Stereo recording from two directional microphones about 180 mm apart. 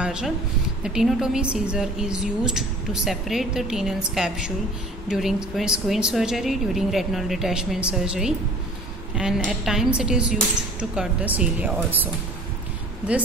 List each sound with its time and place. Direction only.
0.0 s a woman's voice: 5° right (ahead or behind)